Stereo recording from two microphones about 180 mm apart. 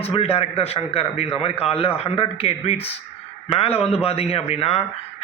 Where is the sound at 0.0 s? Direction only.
35° left (ahead or behind).